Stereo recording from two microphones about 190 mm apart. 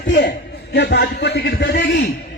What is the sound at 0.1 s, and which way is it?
A man's voice, 65° left (ahead or behind).